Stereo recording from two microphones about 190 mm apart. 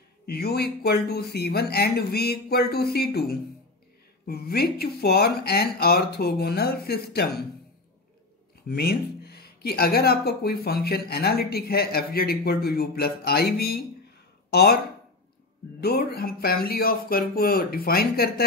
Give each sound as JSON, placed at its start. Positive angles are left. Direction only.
{"t": 0.3, "sound": "speech", "side_deg": 55}
{"t": 8.6, "sound": "speech", "side_deg": 55}
{"t": 15.8, "sound": "speech", "side_deg": 55}